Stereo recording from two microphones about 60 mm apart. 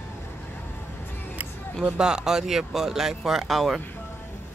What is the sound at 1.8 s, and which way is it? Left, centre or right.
Speech, centre.